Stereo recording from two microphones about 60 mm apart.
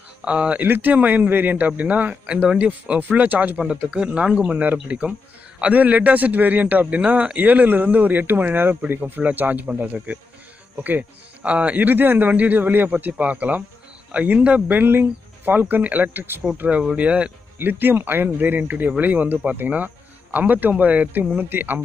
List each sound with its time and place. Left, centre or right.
0.2 s a man's voice: centre
3.6 s speech: centre
4.5 s a man's voice: right
17.6 s a man's voice: right